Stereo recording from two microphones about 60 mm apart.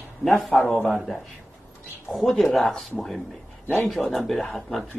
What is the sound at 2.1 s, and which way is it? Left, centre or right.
Speech, centre.